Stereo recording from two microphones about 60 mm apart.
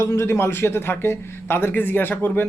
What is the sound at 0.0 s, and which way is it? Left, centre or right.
Speech, left.